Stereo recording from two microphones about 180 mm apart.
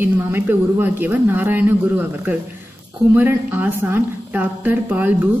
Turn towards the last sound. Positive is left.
turn(degrees=-10)  # may be behind; listen again after turning